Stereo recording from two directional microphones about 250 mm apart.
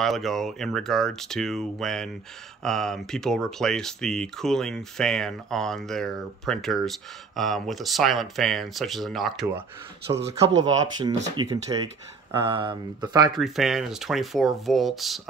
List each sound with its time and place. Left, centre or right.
0.0 s speech: centre
10.1 s speech: centre
13.4 s speech: centre